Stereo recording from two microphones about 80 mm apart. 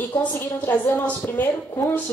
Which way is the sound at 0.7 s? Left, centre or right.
Left.